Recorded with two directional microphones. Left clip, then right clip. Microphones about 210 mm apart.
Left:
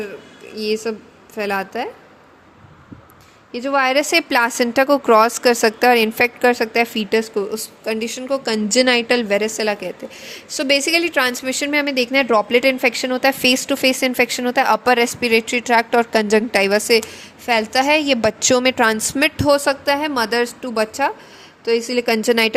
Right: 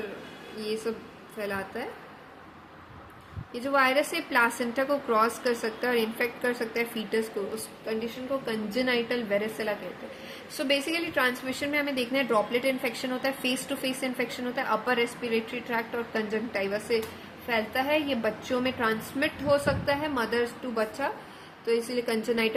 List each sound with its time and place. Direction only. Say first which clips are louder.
0.5 s a woman's voice: left 10 dB; 45° left (ahead or behind)
3.5 s a woman's voice: left 7 dB; 40° left (ahead or behind)